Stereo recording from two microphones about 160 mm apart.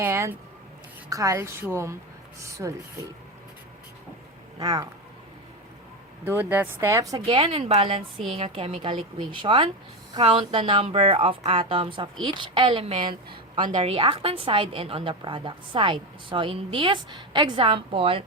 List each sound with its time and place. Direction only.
0.0 s a woman's voice: 15° right (ahead or behind)
4.6 s speech: 25° right (ahead or behind)
6.2 s a woman's voice: 15° right (ahead or behind)
7.3 s a woman's voice: 35° right (ahead or behind)
13.6 s a woman's voice: 55° right (ahead or behind)
13.8 s a woman's voice: 35° right (ahead or behind)